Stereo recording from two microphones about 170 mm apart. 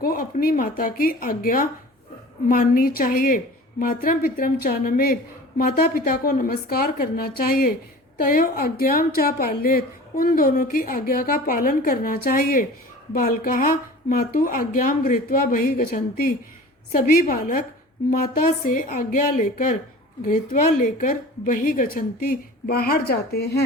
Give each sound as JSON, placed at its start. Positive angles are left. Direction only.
{"t": 0.0, "sound": "a woman's voice", "side_deg": 60}